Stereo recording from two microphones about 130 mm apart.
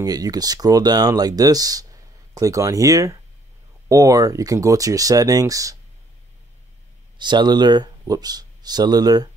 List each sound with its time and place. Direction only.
0.0 s speech: 30° right (ahead or behind)
7.2 s speech: 35° right (ahead or behind)